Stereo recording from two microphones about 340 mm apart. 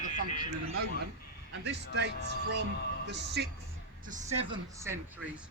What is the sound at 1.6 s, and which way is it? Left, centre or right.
Speech, right.